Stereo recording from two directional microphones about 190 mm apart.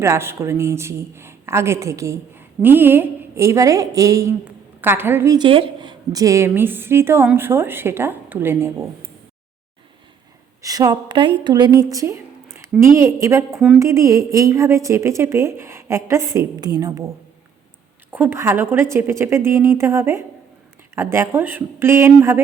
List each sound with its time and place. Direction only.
0.0 s speech: 15° right (ahead or behind)
10.6 s a woman's voice: 20° right (ahead or behind)
18.1 s speech: 10° right (ahead or behind)